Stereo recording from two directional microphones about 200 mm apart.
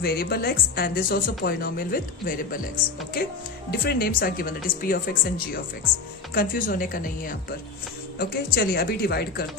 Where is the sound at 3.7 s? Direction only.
50° left (ahead or behind).